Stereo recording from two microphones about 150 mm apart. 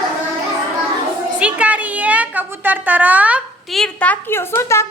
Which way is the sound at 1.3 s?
10° right (ahead or behind).